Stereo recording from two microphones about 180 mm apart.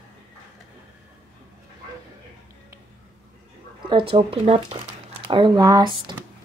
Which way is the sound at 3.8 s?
30° right (ahead or behind).